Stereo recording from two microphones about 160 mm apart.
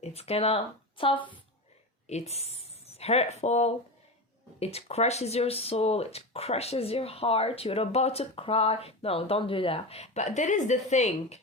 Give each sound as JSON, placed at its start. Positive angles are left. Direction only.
{"t": 0.0, "sound": "speech", "side_deg": 40}